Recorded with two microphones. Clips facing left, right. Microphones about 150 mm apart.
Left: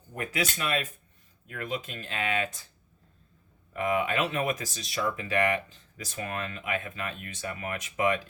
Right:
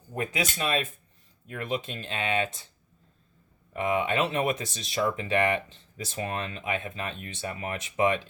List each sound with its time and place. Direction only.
0.1 s speech: 20° right (ahead or behind)
3.7 s speech: 25° right (ahead or behind)